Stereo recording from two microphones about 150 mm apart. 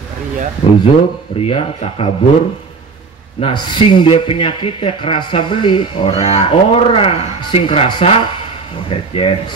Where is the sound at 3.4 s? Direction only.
35° left (ahead or behind).